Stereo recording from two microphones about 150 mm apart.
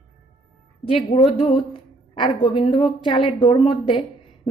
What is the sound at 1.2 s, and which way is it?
A woman's voice, 35° left (ahead or behind).